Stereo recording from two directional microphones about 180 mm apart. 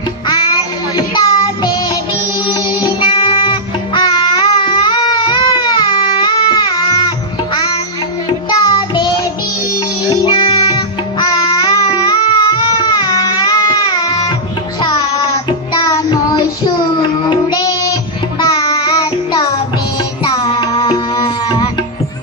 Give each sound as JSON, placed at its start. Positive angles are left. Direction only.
{"t": 0.3, "sound": "child singing", "side_deg": 25}
{"t": 2.4, "sound": "music", "side_deg": 25}
{"t": 8.5, "sound": "music", "side_deg": 25}
{"t": 15.7, "sound": "child singing", "side_deg": 20}
{"t": 17.3, "sound": "music", "side_deg": 20}
{"t": 18.4, "sound": "child singing", "side_deg": 25}
{"t": 20.2, "sound": "music", "side_deg": 25}